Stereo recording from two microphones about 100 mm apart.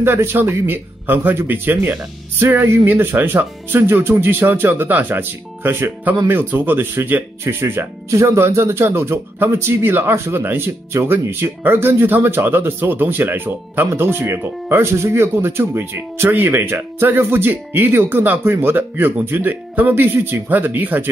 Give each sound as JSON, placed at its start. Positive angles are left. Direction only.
{"t": 0.0, "sound": "speech", "side_deg": -25}